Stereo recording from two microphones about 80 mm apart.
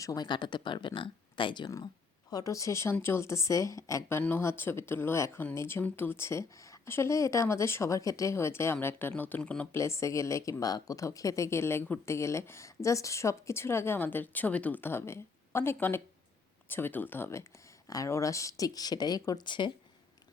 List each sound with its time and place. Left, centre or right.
0.0 s speech: left
0.3 s speech: left
2.3 s speech: left
4.4 s speech: left; by 9.6 s centre
9.7 s speech: left
10.6 s speech: left
17.8 s speech: left
19.4 s speech: left